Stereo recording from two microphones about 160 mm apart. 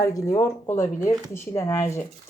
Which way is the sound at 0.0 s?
20° left (ahead or behind).